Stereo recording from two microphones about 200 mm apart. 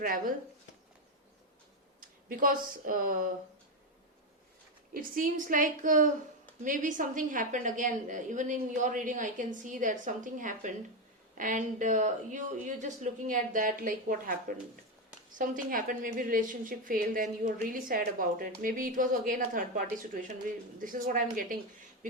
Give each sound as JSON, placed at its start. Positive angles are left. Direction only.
{"t": 0.0, "sound": "a woman's voice", "side_deg": -45}
{"t": 2.3, "sound": "a woman's voice", "side_deg": -45}
{"t": 4.9, "sound": "a woman's voice", "side_deg": -45}